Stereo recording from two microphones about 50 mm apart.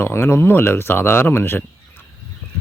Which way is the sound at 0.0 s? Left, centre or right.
Left.